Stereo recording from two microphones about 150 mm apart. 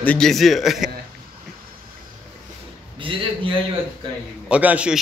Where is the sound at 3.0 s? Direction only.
35° right (ahead or behind).